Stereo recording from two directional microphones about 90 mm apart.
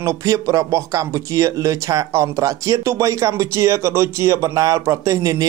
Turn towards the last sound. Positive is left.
turn(degrees=-35)  # may be behind; listen again after turning